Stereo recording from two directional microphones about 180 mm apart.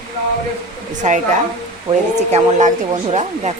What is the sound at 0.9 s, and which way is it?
Speech, 45° right (ahead or behind).